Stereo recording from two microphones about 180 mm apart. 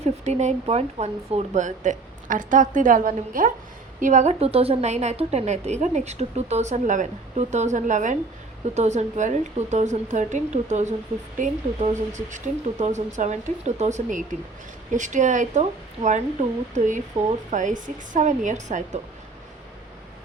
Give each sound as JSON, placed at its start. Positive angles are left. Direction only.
{"t": 0.0, "sound": "a woman's voice", "side_deg": -40}